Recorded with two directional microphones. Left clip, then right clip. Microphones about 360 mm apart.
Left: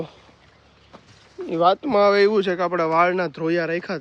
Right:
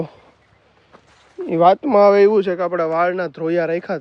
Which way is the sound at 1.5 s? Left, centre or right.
Centre.